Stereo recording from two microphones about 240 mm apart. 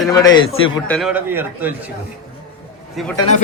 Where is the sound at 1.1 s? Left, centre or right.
Centre.